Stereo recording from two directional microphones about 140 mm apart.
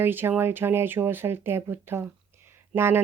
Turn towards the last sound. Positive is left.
turn(degrees=-15)  # may be behind; listen again after turning